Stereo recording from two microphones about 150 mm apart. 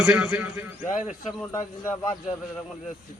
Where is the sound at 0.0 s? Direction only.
5° right (ahead or behind).